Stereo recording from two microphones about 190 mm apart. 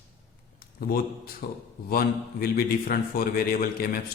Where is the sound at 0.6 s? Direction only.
50° left (ahead or behind).